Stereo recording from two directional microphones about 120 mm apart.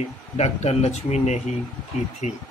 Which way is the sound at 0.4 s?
65° left (ahead or behind).